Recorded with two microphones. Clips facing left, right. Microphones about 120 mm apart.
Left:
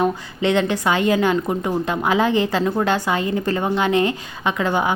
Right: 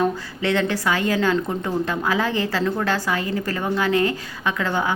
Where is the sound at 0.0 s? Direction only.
20° left (ahead or behind).